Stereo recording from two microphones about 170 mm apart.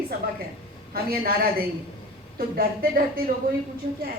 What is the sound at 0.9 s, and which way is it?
A woman's voice, 60° right (ahead or behind).